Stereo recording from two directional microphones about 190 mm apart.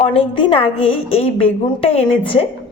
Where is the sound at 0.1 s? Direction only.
25° left (ahead or behind).